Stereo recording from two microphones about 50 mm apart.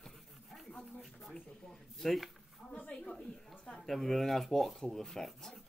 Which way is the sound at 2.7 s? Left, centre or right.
Left.